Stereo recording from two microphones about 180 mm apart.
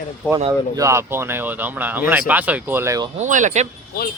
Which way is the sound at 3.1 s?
45° right (ahead or behind).